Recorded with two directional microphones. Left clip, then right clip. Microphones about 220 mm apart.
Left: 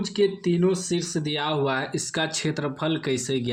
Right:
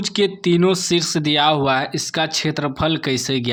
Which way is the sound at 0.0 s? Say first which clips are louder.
Right 4 dB; 35° right (ahead or behind).